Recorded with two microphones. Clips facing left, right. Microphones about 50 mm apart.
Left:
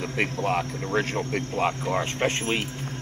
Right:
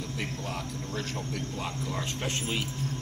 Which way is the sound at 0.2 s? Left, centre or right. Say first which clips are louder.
Left 13 dB; left.